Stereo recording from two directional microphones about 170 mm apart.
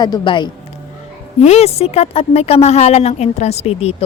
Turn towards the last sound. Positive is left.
turn(degrees=40)  # may be behind; listen again after turning